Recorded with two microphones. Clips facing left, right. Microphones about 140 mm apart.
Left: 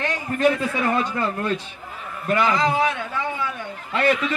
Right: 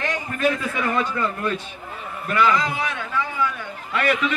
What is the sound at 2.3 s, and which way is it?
Speech, 30° left (ahead or behind).